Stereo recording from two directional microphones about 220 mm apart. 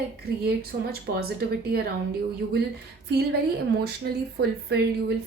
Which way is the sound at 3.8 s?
45° right (ahead or behind).